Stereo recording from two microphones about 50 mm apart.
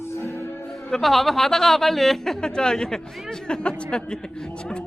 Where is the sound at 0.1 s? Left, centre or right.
Left.